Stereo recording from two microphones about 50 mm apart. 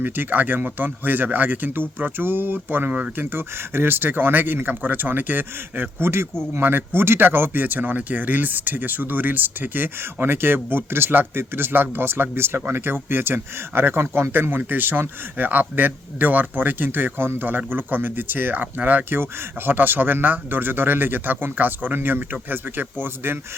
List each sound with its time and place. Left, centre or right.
0.0 s speech: right